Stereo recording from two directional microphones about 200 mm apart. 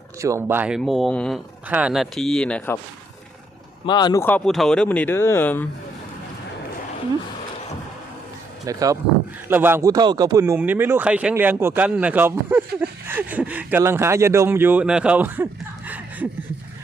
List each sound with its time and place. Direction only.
0.2 s speech: 15° right (ahead or behind); by 2.7 s 5° left (ahead or behind)
3.8 s speech: 20° left (ahead or behind)
8.6 s speech: 15° right (ahead or behind)
15.9 s chuckle: 10° right (ahead or behind)